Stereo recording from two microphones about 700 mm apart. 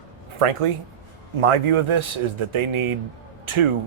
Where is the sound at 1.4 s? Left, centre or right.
Right.